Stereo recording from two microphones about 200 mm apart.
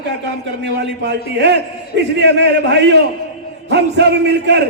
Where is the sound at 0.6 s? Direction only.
60° right (ahead or behind).